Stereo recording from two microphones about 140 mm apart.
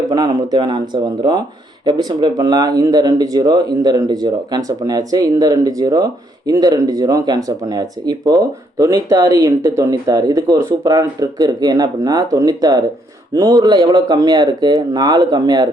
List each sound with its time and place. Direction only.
0.1 s speech: 25° right (ahead or behind)